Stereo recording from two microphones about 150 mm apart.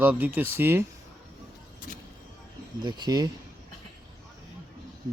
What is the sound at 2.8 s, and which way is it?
Speech, 30° right (ahead or behind).